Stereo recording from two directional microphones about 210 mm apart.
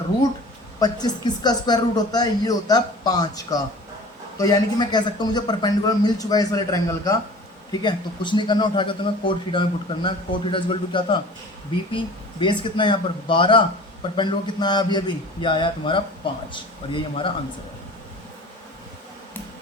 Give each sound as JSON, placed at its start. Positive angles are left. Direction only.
{"t": 0.8, "sound": "a man's voice", "side_deg": 20}